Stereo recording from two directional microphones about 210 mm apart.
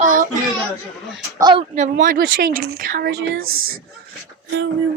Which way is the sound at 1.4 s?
25° right (ahead or behind).